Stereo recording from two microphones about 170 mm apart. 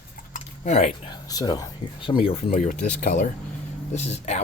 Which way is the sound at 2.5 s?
50° left (ahead or behind).